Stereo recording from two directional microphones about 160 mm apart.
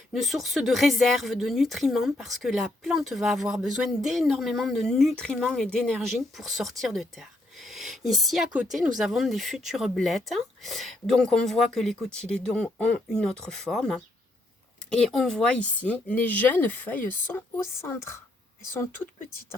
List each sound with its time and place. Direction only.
0.1 s speech: centre (ahead or behind); by 18.1 s 15° left (ahead or behind)